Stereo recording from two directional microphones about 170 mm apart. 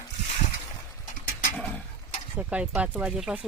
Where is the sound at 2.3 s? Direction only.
10° right (ahead or behind).